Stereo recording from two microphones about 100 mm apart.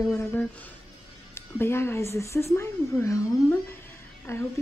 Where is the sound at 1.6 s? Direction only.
25° left (ahead or behind).